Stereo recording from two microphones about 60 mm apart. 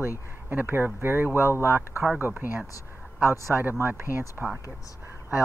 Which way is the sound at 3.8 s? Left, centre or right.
Right.